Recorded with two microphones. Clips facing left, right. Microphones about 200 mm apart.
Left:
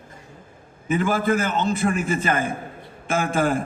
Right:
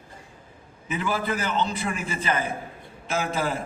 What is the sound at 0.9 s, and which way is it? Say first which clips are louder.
A man's voice: left 6 dB; 45° left (ahead or behind).